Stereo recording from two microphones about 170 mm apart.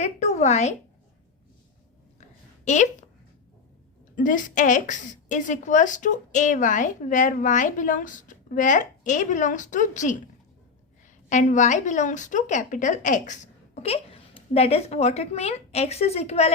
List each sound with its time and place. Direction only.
0.0 s a woman's voice: 40° left (ahead or behind)
2.7 s a woman's voice: 45° left (ahead or behind)
4.1 s a woman's voice: 50° left (ahead or behind)
11.3 s a woman's voice: 45° left (ahead or behind)